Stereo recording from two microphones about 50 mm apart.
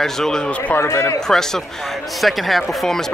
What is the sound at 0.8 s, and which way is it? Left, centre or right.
Speech, left.